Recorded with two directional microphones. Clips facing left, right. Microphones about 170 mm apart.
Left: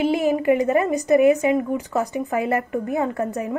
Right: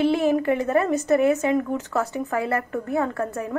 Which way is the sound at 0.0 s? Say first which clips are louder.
Left 1 dB; 15° left (ahead or behind).